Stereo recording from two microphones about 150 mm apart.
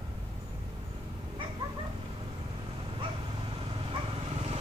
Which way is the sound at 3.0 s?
35° right (ahead or behind).